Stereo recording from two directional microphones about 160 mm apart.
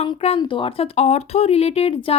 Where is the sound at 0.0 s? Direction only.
40° left (ahead or behind).